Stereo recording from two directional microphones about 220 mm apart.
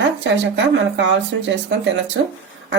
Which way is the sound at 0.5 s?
55° right (ahead or behind).